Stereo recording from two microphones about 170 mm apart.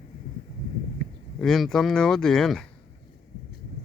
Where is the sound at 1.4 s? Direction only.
Centre (ahead or behind).